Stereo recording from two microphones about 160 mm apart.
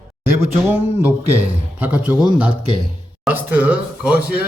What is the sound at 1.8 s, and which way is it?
A man's voice, 10° right (ahead or behind).